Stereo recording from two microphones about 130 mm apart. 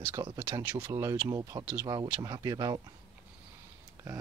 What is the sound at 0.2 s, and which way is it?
Speech, 25° right (ahead or behind).